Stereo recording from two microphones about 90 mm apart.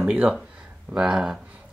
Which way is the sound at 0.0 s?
15° right (ahead or behind).